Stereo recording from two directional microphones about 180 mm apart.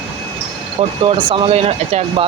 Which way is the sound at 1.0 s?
30° right (ahead or behind).